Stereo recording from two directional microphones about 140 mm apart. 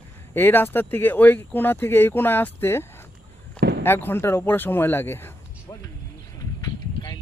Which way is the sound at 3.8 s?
15° left (ahead or behind).